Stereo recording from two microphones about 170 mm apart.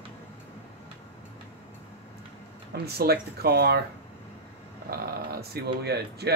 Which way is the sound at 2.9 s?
65° right (ahead or behind).